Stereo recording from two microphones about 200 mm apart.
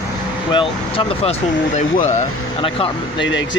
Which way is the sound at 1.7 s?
35° left (ahead or behind).